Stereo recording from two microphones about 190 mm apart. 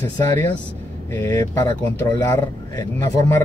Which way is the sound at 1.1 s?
15° left (ahead or behind).